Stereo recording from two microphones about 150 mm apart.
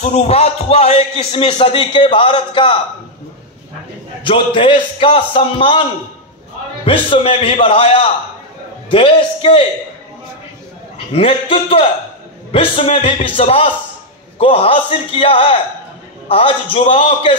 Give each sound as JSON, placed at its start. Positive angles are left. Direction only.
{"t": 0.0, "sound": "a man's voice", "side_deg": 45}
{"t": 4.2, "sound": "a man's voice", "side_deg": 35}
{"t": 11.1, "sound": "a man's voice", "side_deg": 40}